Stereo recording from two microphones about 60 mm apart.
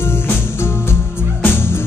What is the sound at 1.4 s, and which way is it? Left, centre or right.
Music, left.